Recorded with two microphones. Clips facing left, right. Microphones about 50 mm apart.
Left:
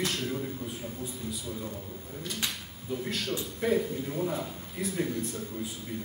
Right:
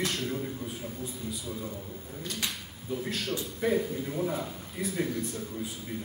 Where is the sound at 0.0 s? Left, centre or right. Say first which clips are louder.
Even; centre.